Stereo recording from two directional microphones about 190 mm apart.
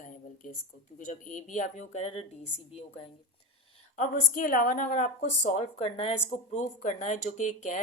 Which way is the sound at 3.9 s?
45° left (ahead or behind).